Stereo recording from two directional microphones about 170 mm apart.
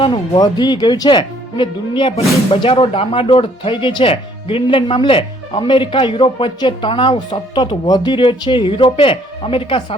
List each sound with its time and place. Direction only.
0.0 s speech: 25° left (ahead or behind)